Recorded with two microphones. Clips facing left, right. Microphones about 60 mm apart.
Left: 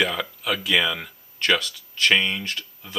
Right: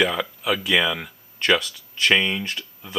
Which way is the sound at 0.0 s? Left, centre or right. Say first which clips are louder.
Right 2 dB; centre.